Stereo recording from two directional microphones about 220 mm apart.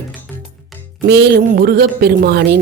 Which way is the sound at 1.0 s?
50° right (ahead or behind).